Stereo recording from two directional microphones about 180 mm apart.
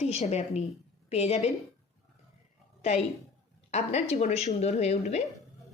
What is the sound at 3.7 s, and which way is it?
Speech, 35° left (ahead or behind).